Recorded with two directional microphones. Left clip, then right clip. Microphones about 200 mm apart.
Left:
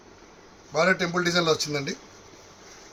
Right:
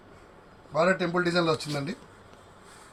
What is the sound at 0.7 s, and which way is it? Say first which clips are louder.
Speech: left 2 dB; 55° left (ahead or behind).